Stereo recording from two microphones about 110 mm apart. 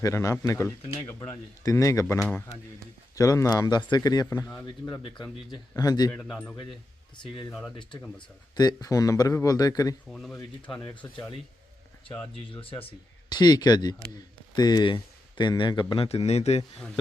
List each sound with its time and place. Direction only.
0.0 s speech: 30° left (ahead or behind)
5.5 s speech: 35° left (ahead or behind)
6.1 s a man's voice: 5° left (ahead or behind)
7.2 s speech: 45° left (ahead or behind)
8.5 s speech: 35° left (ahead or behind)
10.1 s a man's voice: 5° left (ahead or behind)
12.5 s speech: 55° left (ahead or behind)
13.3 s speech: 40° left (ahead or behind)
16.0 s a man's voice: 70° left (ahead or behind)